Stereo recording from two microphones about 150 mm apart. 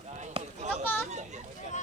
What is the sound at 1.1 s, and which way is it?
Children playing, 50° right (ahead or behind).